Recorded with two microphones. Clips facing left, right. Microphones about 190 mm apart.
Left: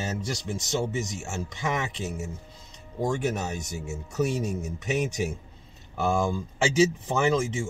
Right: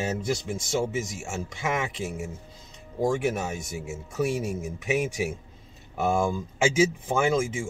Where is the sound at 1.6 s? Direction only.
5° right (ahead or behind).